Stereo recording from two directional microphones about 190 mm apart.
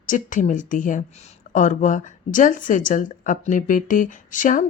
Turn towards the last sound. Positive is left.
turn(degrees=45)  # may be behind; listen again after turning